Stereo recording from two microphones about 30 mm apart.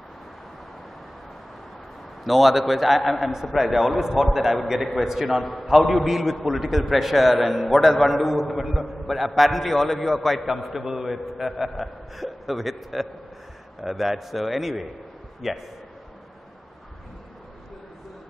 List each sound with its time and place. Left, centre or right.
2.2 s a man's voice: centre
10.4 s a man's voice: centre